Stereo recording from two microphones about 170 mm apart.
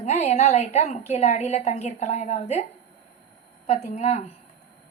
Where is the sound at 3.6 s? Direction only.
40° left (ahead or behind).